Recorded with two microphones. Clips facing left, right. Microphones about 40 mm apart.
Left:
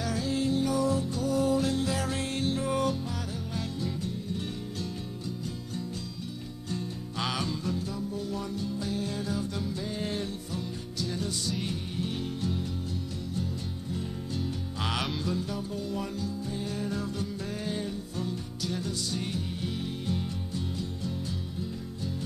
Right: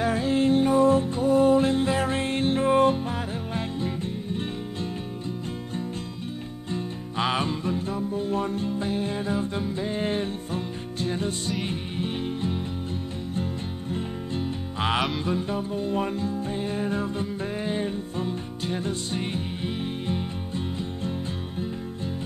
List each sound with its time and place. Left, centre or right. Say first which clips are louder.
0.0 s music: right 7 dB; right
6.7 s music: right 4 dB; right